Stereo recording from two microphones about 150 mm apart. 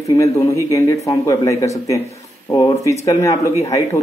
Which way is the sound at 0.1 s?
25° left (ahead or behind).